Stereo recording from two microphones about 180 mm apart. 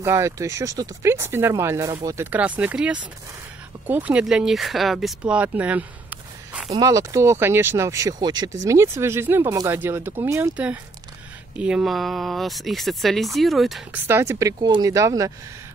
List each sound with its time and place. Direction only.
0.0 s speech: 15° right (ahead or behind)
14.0 s speech: 15° right (ahead or behind)